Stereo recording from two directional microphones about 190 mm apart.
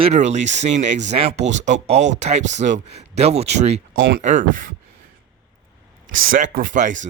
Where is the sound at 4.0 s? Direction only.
50° right (ahead or behind).